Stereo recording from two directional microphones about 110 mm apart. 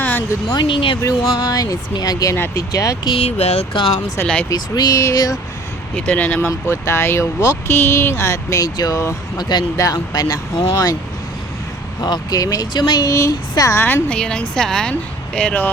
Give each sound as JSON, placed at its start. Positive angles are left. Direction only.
{"t": 0.0, "sound": "a sound", "side_deg": 15}
{"t": 0.5, "sound": "speech", "side_deg": 50}
{"t": 1.0, "sound": "speech", "side_deg": 30}
{"t": 3.1, "sound": "speech", "side_deg": 70}
{"t": 3.8, "sound": "speech", "side_deg": 55}
{"t": 4.4, "sound": "speech", "side_deg": 40}
{"t": 6.0, "sound": "a woman's voice", "side_deg": 15}
{"t": 6.5, "sound": "speech", "side_deg": 25}
{"t": 11.9, "sound": "speech", "side_deg": 40}
{"t": 13.8, "sound": "a woman's voice", "side_deg": 15}